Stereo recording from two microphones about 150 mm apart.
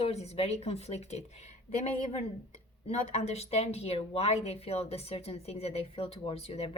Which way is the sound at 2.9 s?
45° left (ahead or behind).